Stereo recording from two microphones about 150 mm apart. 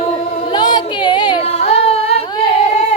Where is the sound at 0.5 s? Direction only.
30° left (ahead or behind).